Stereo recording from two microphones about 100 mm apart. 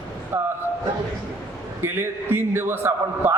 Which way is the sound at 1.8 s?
20° right (ahead or behind).